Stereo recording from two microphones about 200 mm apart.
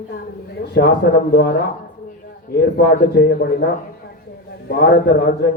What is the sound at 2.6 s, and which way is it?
A man's voice, 55° left (ahead or behind).